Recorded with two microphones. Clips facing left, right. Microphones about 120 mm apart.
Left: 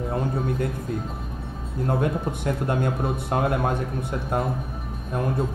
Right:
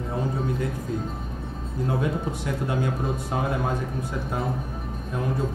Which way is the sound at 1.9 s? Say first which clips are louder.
Left 2 dB; 55° left (ahead or behind).